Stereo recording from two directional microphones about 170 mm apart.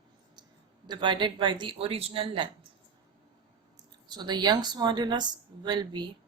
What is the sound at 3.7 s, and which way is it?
Speech, 25° right (ahead or behind).